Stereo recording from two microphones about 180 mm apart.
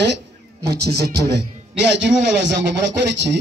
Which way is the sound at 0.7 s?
65° right (ahead or behind).